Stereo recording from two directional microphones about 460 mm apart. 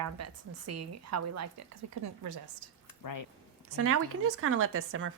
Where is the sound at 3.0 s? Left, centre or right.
Left.